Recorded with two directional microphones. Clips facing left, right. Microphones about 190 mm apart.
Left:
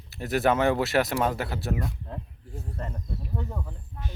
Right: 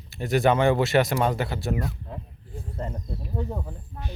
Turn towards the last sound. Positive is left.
turn(degrees=-40)  # may be behind; listen again after turning